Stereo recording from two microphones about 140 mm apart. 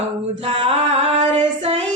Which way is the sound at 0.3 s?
50° right (ahead or behind).